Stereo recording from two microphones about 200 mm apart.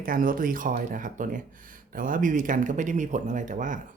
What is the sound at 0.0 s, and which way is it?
Speech, 45° right (ahead or behind).